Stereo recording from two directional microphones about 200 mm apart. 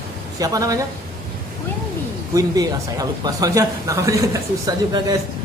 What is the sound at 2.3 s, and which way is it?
Speech, 20° right (ahead or behind).